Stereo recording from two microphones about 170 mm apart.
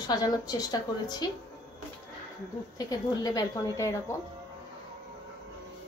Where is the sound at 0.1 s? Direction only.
20° left (ahead or behind).